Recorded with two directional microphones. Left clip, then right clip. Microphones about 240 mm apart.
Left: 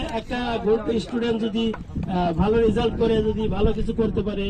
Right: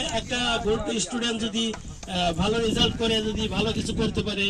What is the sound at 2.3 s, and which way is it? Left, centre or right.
A man's voice, right.